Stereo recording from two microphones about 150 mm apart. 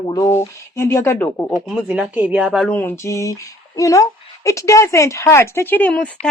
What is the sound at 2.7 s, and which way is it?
A woman's voice, 15° left (ahead or behind).